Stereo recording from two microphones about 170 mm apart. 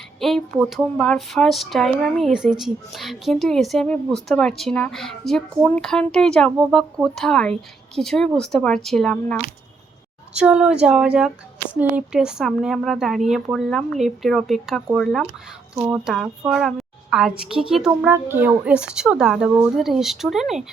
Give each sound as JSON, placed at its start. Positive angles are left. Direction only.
{"t": 0.2, "sound": "speech", "side_deg": 0}
{"t": 10.3, "sound": "a woman's voice", "side_deg": -5}